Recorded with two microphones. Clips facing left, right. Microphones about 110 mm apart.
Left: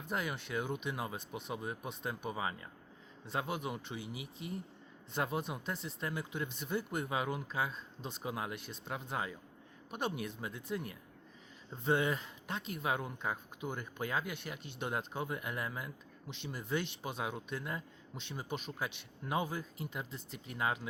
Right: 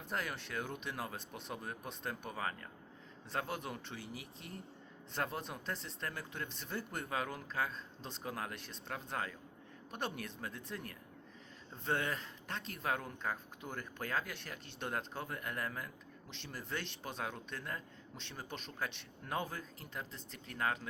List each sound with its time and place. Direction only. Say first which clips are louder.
0.1 s a man's voice: left 3 dB; 5° left (ahead or behind)